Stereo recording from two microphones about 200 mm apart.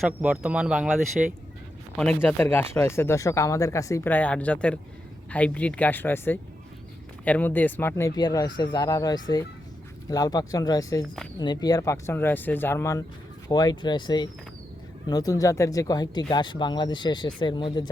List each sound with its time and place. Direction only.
0.0 s speech: 5° right (ahead or behind); by 17.8 s 20° left (ahead or behind)